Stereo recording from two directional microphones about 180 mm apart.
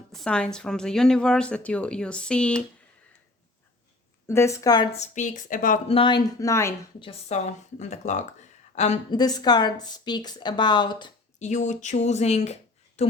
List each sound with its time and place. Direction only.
0.1 s a woman's voice: 5° left (ahead or behind)
4.3 s speech: 15° left (ahead or behind)
4.9 s a woman's voice: 40° left (ahead or behind)
5.9 s speech: 25° left (ahead or behind)
7.0 s a woman's voice: 40° left (ahead or behind)
9.0 s speech: 20° left (ahead or behind)
11.3 s speech: 40° left (ahead or behind)